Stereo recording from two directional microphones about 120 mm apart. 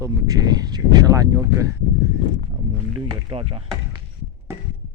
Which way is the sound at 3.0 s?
45° right (ahead or behind).